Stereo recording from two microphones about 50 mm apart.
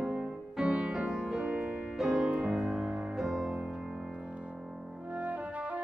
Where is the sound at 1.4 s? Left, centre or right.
Right.